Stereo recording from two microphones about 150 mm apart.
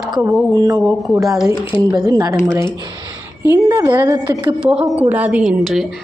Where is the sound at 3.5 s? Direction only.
20° right (ahead or behind).